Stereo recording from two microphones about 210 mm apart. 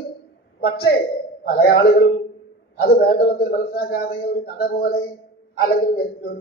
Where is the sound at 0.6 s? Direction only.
50° left (ahead or behind).